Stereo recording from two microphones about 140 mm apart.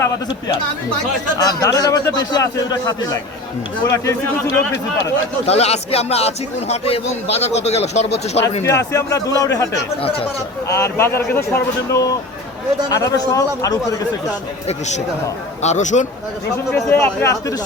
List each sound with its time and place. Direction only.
1.4 s a man's voice: 25° left (ahead or behind)
5.5 s a man's voice: 50° left (ahead or behind)
8.6 s a man's voice: 20° left (ahead or behind)
10.7 s a man's voice: 20° left (ahead or behind)
14.7 s a man's voice: 55° left (ahead or behind)
16.7 s speech: 15° left (ahead or behind)